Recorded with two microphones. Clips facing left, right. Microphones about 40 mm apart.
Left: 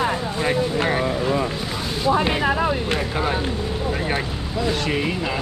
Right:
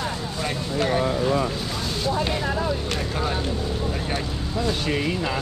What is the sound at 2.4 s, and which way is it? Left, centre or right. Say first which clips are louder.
Speech: left 5 dB; left.